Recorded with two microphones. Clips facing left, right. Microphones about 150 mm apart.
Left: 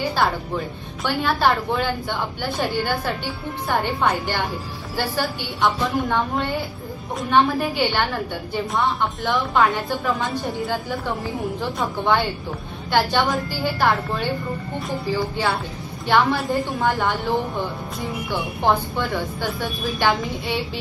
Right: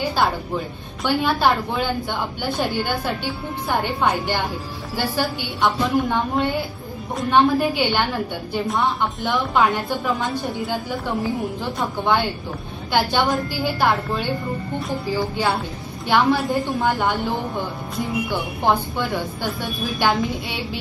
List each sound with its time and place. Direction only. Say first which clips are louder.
0.2 s a woman's voice: right 1 dB; centre (ahead or behind)